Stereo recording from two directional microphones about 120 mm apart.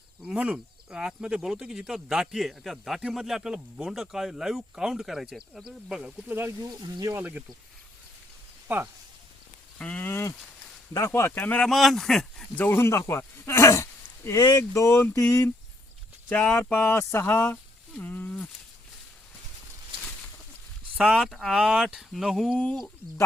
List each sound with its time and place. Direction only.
0.2 s speech: 5° right (ahead or behind)
6.6 s speech: 35° right (ahead or behind)
7.2 s speech: 10° right (ahead or behind)
8.6 s speech: 20° right (ahead or behind)
9.7 s speech: 10° left (ahead or behind)
10.1 s speech: 20° left (ahead or behind)
11.7 s speech: centre (ahead or behind)
12.6 s speech: 20° left (ahead or behind)
14.6 s speech: 20° left (ahead or behind)
20.9 s speech: 10° right (ahead or behind)
21.2 s speech: centre (ahead or behind)
22.5 s speech: 10° left (ahead or behind)